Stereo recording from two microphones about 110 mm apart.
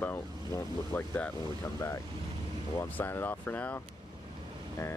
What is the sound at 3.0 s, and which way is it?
Speech, 20° left (ahead or behind).